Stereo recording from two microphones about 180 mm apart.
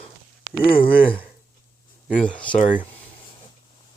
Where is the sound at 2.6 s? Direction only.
45° left (ahead or behind).